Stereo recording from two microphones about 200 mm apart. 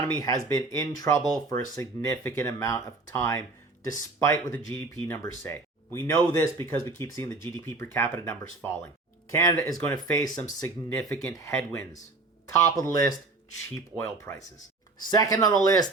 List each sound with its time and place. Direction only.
0.0 s speech: 15° left (ahead or behind)